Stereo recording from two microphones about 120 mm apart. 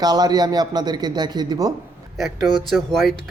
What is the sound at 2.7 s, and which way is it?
Speech, centre (ahead or behind).